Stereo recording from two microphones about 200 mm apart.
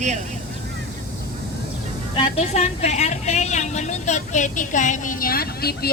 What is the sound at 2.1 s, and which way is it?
A woman's voice, 30° left (ahead or behind).